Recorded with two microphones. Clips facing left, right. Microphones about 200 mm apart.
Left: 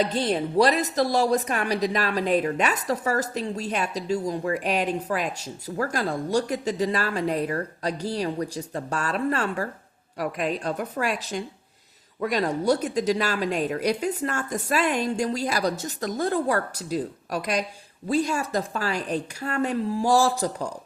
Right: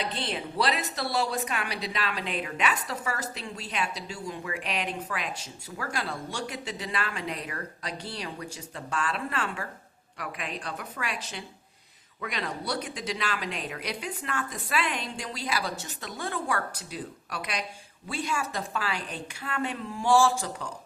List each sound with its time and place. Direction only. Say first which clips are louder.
0.0 s a woman's voice: left 9 dB; 45° left (ahead or behind)